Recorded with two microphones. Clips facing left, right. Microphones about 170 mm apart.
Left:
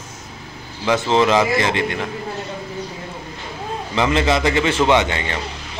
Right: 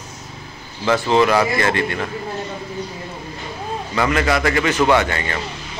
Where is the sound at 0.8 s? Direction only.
20° left (ahead or behind).